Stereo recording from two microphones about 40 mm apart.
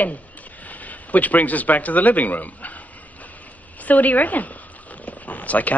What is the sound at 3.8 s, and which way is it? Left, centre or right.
Zipper, left.